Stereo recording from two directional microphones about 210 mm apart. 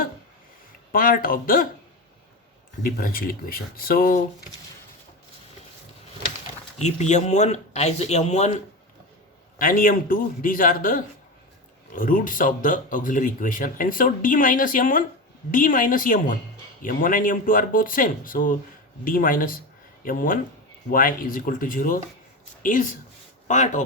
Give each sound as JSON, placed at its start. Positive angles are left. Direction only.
{"t": 0.9, "sound": "speech", "side_deg": 40}
{"t": 2.8, "sound": "speech", "side_deg": 45}
{"t": 6.7, "sound": "speech", "side_deg": 35}